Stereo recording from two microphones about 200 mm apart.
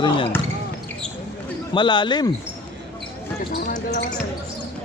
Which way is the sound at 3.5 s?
50° left (ahead or behind).